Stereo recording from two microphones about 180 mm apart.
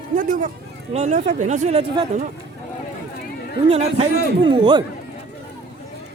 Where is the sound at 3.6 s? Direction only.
35° right (ahead or behind).